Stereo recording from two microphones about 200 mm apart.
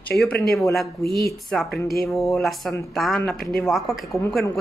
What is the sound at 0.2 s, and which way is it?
Speech, centre (ahead or behind).